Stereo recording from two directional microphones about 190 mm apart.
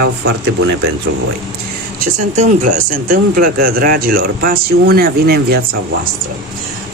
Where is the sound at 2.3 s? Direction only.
45° right (ahead or behind).